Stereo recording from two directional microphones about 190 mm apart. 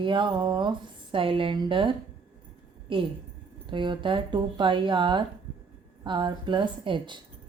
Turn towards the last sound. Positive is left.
turn(degrees=-25)  # may be behind; listen again after turning